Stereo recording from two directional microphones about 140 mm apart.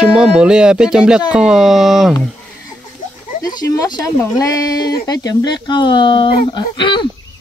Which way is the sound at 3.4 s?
25° left (ahead or behind).